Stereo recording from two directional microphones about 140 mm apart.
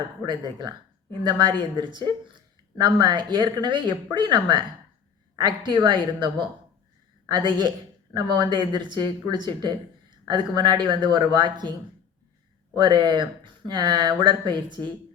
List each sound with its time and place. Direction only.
0.3 s speech: 35° right (ahead or behind)
12.7 s speech: 35° right (ahead or behind)